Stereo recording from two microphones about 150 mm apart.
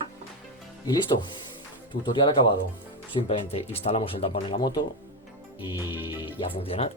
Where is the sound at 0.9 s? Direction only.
30° left (ahead or behind).